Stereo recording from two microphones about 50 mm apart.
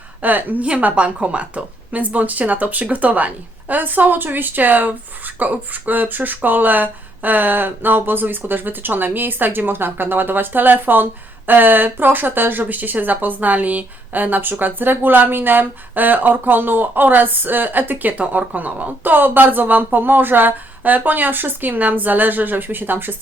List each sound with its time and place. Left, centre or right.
0.2 s a woman's voice: right